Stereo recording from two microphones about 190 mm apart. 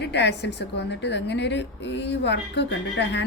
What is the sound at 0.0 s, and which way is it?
A woman's voice, 65° left (ahead or behind).